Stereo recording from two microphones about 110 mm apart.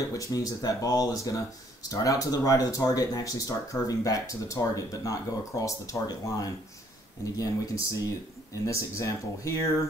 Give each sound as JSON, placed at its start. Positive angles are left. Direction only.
{"t": 0.1, "sound": "speech", "side_deg": 30}